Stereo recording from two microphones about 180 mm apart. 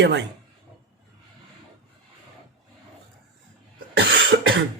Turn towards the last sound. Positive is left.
turn(degrees=-85)